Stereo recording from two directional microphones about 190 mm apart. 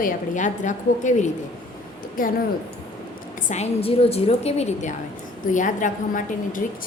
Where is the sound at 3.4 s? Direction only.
35° left (ahead or behind).